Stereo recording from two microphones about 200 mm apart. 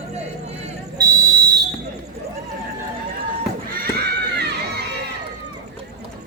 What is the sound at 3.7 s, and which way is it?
Run, 50° right (ahead or behind).